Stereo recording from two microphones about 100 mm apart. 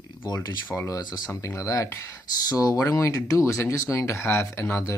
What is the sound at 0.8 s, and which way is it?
Speech, 40° left (ahead or behind).